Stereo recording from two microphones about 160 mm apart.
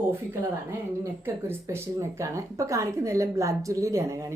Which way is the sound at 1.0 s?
15° right (ahead or behind).